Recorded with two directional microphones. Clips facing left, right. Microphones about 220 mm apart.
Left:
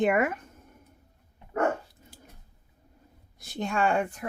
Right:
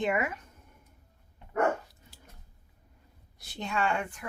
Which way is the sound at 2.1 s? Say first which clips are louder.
Left 8 dB; 50° left (ahead or behind).